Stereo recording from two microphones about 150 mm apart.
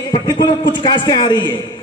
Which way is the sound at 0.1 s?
30° left (ahead or behind).